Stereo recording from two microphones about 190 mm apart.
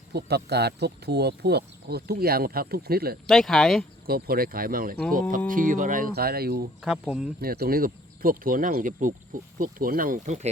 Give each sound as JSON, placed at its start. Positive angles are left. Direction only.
{"t": 0.1, "sound": "speech", "side_deg": -60}
{"t": 3.2, "sound": "speech", "side_deg": 0}
{"t": 4.0, "sound": "speech", "side_deg": -50}
{"t": 6.8, "sound": "speech", "side_deg": -5}
{"t": 7.4, "sound": "speech", "side_deg": -55}